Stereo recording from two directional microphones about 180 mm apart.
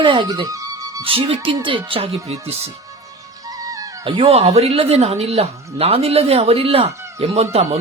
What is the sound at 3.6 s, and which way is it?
Speech, 20° right (ahead or behind).